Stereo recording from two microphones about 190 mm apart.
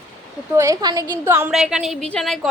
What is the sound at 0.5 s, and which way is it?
A woman's voice, 15° right (ahead or behind).